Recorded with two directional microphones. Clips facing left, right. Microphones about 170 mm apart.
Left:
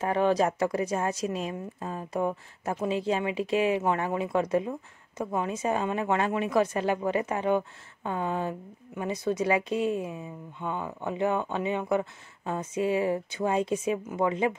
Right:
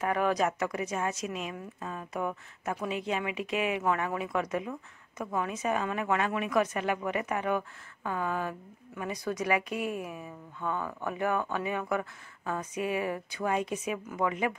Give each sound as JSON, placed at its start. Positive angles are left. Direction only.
{"t": 0.0, "sound": "a woman's voice", "side_deg": 30}